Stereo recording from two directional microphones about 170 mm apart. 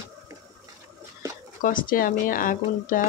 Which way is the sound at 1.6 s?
55° left (ahead or behind).